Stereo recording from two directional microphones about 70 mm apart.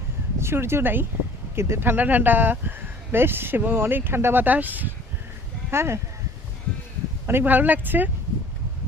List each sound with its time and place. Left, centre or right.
0.3 s speech: right
5.7 s speech: right
7.3 s speech: right